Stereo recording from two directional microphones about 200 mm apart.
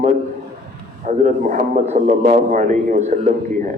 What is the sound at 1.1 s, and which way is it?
A man's voice, 40° right (ahead or behind).